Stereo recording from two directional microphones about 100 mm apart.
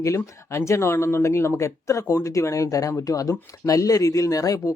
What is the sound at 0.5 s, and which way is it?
Speech, 30° left (ahead or behind).